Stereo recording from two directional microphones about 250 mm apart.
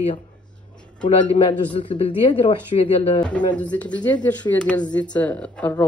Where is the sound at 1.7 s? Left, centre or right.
Centre.